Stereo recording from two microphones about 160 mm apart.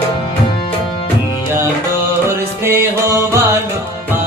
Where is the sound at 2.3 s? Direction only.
15° right (ahead or behind).